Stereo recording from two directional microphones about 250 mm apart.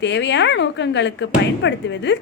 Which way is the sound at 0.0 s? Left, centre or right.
Left.